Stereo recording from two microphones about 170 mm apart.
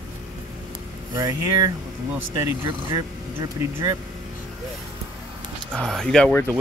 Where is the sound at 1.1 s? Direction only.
20° right (ahead or behind).